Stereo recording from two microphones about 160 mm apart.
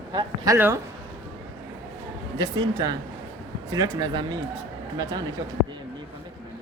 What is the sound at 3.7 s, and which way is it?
Speech, 25° right (ahead or behind).